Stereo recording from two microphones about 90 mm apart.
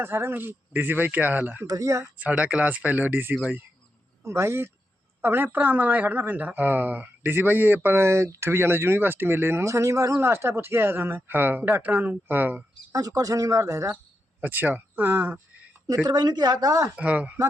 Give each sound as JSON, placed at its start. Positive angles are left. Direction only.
{"t": 0.0, "sound": "speech", "side_deg": -25}
{"t": 1.6, "sound": "speech", "side_deg": -40}
{"t": 2.1, "sound": "speech", "side_deg": -15}
{"t": 12.9, "sound": "speech", "side_deg": -40}
{"t": 14.4, "sound": "speech", "side_deg": -20}
{"t": 16.0, "sound": "a woman's voice", "side_deg": -50}
{"t": 17.0, "sound": "speech", "side_deg": -15}